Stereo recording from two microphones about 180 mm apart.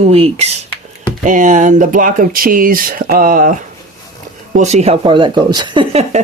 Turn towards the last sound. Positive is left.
turn(degrees=-25)  # may be behind; listen again after turning